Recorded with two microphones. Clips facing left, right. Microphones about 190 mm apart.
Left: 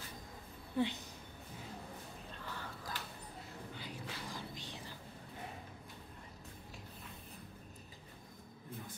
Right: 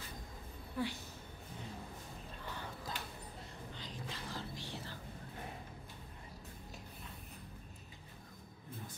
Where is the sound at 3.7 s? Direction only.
10° left (ahead or behind).